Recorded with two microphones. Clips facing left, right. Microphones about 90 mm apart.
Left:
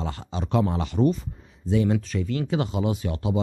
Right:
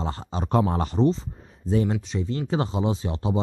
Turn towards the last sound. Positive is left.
turn(degrees=-30)  # may be behind; listen again after turning